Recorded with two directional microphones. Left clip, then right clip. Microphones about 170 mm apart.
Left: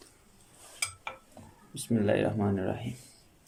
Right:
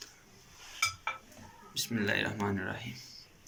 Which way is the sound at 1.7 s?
45° left (ahead or behind).